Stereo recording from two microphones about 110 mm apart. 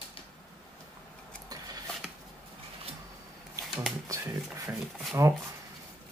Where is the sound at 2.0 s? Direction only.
10° right (ahead or behind).